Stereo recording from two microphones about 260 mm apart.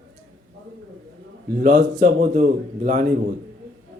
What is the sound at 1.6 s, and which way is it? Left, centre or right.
Speech, right.